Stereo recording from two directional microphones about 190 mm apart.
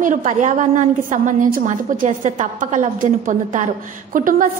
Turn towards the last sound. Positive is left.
turn(degrees=-45)  # may be behind; listen again after turning